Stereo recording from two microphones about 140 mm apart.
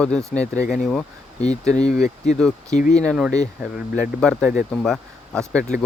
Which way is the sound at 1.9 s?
55° left (ahead or behind).